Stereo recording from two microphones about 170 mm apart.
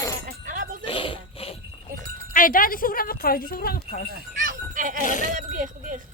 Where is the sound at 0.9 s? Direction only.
30° left (ahead or behind).